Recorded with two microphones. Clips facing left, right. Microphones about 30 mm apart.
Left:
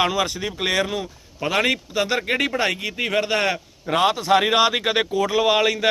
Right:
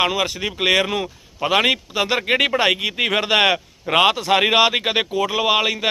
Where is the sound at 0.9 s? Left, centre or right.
Right.